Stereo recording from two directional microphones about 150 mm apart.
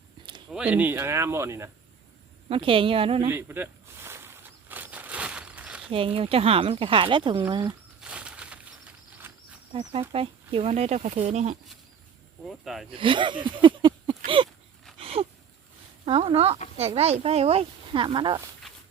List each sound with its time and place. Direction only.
0.2 s a sound: 30° right (ahead or behind)
0.5 s speech: 10° right (ahead or behind)
2.5 s speech: 35° right (ahead or behind)
3.2 s a sound: 15° right (ahead or behind)
5.9 s speech: 40° right (ahead or behind)
8.0 s a sound: 5° right (ahead or behind)
9.1 s cricket: 10° right (ahead or behind)
10.1 s speech: 40° right (ahead or behind)
12.5 s speech: centre (ahead or behind)
12.9 s speech: 35° right (ahead or behind)
14.9 s wheeze: 40° right (ahead or behind)
16.0 s speech: 40° right (ahead or behind)